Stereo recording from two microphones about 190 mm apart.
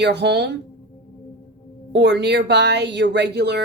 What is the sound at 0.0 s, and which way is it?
Speech, 65° right (ahead or behind).